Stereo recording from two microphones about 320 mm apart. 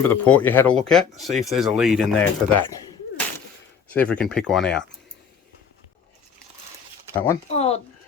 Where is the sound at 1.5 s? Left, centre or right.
Centre.